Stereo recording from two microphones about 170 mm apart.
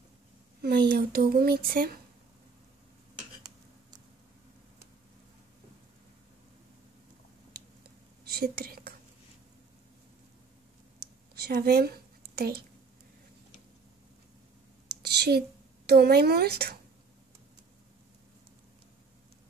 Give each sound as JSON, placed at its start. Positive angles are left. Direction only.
{"t": 0.6, "sound": "speech", "side_deg": -65}
{"t": 7.5, "sound": "whispering", "side_deg": -65}
{"t": 11.4, "sound": "speech", "side_deg": -65}
{"t": 14.9, "sound": "a sound", "side_deg": -75}
{"t": 15.9, "sound": "a woman's voice", "side_deg": -70}